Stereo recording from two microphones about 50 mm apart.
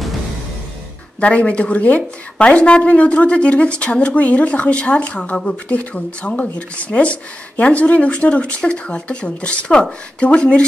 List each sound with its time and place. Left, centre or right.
1.2 s speech: left